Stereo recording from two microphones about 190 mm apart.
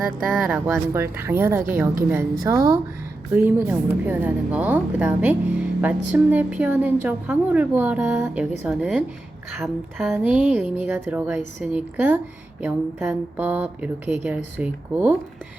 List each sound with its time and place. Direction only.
0.0 s a woman's voice: centre (ahead or behind)
0.9 s a woman's voice: 15° right (ahead or behind)